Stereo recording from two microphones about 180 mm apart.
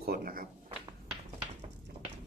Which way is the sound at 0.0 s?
55° right (ahead or behind).